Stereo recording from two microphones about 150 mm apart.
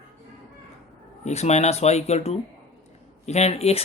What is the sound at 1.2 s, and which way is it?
Speech, 45° left (ahead or behind).